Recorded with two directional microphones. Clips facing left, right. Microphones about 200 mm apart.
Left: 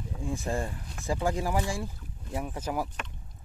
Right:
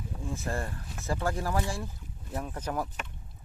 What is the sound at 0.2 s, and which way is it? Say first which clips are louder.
Speech: left 3 dB; 15° left (ahead or behind).